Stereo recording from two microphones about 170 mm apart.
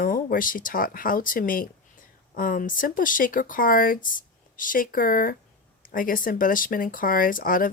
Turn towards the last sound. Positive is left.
turn(degrees=55)  # may be behind; listen again after turning